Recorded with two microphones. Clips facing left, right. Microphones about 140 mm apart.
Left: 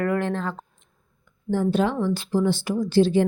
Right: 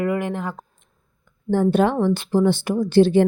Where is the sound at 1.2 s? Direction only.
55° right (ahead or behind).